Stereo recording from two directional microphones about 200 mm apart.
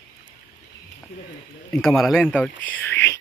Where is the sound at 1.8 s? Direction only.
Centre (ahead or behind).